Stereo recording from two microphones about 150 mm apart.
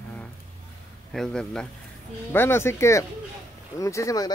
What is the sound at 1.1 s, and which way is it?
Speech, 5° left (ahead or behind).